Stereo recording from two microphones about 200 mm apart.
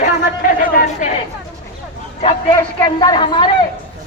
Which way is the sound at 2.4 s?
20° left (ahead or behind).